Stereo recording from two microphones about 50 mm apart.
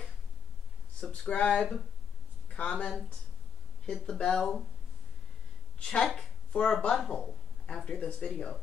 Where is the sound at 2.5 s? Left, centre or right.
Left.